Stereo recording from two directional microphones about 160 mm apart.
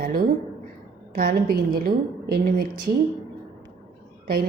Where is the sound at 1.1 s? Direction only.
75° right (ahead or behind).